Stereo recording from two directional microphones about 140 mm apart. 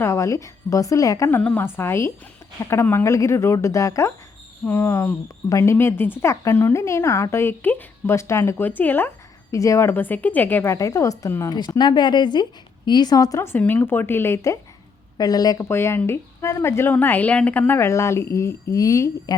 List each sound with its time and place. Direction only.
0.0 s speech: 20° left (ahead or behind)
1.4 s speech: 10° left (ahead or behind)